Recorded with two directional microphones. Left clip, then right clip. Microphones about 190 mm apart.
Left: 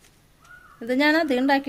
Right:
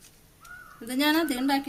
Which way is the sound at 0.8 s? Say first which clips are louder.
Left 5 dB; 35° left (ahead or behind).